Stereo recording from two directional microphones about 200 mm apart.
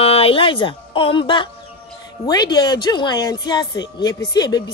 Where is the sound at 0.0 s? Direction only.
30° left (ahead or behind).